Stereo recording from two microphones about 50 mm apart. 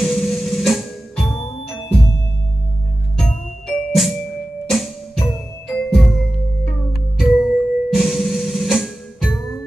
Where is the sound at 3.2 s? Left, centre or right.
Centre.